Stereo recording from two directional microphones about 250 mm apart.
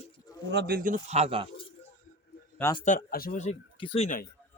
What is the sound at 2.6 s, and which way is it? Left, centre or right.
Speech, centre.